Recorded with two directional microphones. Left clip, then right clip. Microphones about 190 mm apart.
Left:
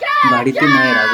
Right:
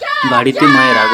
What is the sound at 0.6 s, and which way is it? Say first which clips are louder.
Speech: right 4 dB; 20° right (ahead or behind).